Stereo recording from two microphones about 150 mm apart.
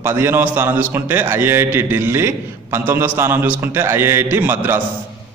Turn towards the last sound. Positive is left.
turn(degrees=-10)  # may be behind; listen again after turning